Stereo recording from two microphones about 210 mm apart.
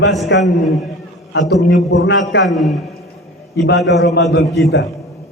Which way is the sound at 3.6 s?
55° left (ahead or behind).